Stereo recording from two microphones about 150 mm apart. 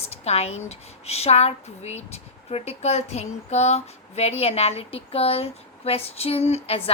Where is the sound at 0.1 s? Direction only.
45° left (ahead or behind).